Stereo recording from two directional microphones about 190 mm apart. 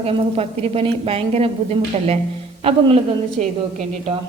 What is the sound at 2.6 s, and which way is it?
Speech, 30° right (ahead or behind).